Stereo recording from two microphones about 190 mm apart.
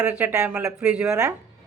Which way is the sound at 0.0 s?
10° right (ahead or behind).